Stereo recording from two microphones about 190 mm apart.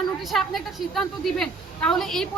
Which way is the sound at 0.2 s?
Centre (ahead or behind).